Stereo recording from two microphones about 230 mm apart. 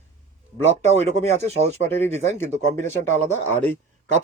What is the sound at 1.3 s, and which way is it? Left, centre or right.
Speech, right.